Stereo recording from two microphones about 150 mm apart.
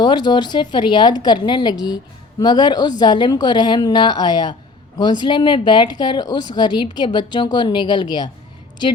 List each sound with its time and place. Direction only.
0.0 s a woman's voice: 30° left (ahead or behind)